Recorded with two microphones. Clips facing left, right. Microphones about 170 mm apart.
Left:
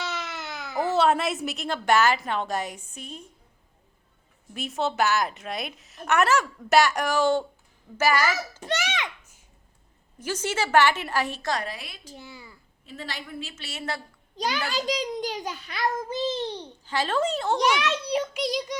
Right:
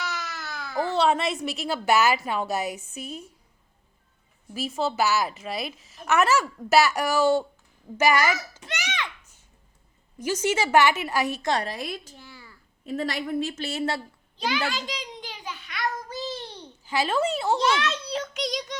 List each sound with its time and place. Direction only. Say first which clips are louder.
0.0 s babbling: left 1 dB; 25° left (ahead or behind)
0.9 s a woman's voice: left 1 dB; centre (ahead or behind)
4.5 s a woman's voice: even; centre (ahead or behind)
10.2 s a woman's voice: right 3 dB; 10° right (ahead or behind)
11.4 s a woman's voice: right 3 dB; 30° right (ahead or behind)
12.1 s a child's voice: left 4 dB; 15° left (ahead or behind)
12.8 s a woman's voice: right 9 dB; 45° right (ahead or behind)
14.3 s a child's voice: even; 40° left (ahead or behind); by 16.5 s 25° left (ahead or behind)
16.8 s a woman's voice: right 1 dB; 10° right (ahead or behind)
17.6 s a child's voice: left 1 dB; 15° left (ahead or behind)